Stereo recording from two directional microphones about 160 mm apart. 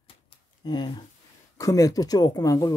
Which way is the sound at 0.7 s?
25° left (ahead or behind).